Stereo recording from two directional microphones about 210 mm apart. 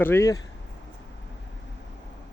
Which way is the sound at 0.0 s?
10° left (ahead or behind).